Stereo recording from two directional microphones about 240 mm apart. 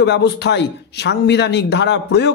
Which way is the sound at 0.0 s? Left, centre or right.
Left.